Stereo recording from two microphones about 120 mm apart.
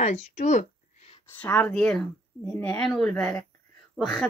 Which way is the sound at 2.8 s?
Centre (ahead or behind).